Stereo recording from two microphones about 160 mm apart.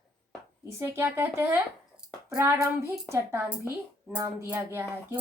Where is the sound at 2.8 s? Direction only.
15° right (ahead or behind).